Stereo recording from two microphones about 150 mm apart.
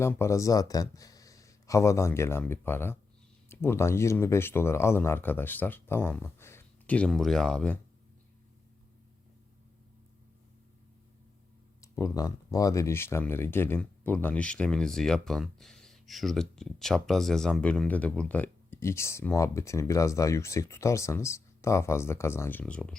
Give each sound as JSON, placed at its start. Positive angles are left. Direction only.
{"t": 0.0, "sound": "speech", "side_deg": 20}
{"t": 11.8, "sound": "speech", "side_deg": 20}